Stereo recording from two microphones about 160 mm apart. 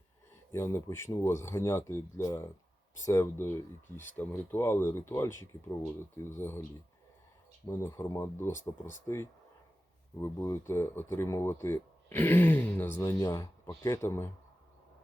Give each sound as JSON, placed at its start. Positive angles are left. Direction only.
{"t": 0.5, "sound": "speech", "side_deg": 15}
{"t": 7.7, "sound": "speech", "side_deg": 15}